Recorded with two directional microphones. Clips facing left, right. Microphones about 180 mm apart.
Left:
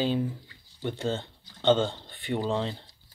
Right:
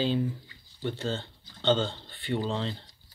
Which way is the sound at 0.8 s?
15° left (ahead or behind).